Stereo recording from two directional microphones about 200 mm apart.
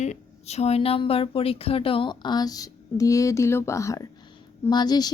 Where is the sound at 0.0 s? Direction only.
35° left (ahead or behind).